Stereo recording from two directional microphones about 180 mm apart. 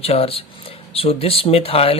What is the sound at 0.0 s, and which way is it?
Speech, 35° left (ahead or behind).